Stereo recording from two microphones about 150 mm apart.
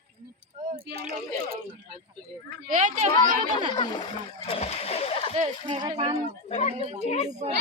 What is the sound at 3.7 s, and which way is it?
Speech, 30° left (ahead or behind).